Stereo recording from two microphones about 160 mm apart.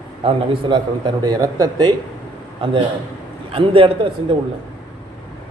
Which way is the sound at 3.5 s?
35° right (ahead or behind).